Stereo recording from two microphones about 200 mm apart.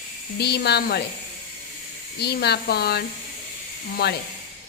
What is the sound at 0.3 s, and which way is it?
Speech, 55° left (ahead or behind).